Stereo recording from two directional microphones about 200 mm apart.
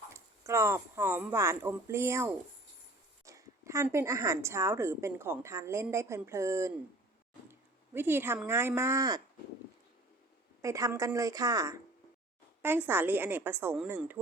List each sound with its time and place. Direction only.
0.1 s a woman's voice: 15° right (ahead or behind)
7.9 s a woman's voice: 10° right (ahead or behind)
10.6 s a woman's voice: 15° right (ahead or behind)